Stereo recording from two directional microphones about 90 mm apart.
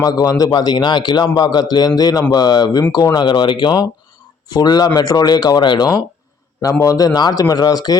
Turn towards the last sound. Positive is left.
turn(degrees=50)  # may be behind; listen again after turning